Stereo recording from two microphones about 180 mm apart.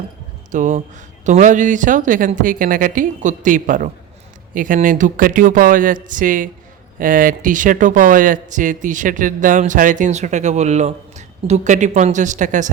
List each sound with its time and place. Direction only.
0.5 s speech: 45° right (ahead or behind)